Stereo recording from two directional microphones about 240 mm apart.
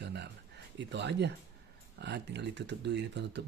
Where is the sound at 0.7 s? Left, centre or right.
Right.